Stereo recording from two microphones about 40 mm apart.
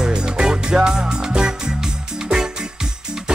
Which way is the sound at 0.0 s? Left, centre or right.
Centre.